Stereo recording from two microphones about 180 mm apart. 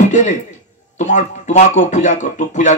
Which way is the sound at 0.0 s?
40° left (ahead or behind).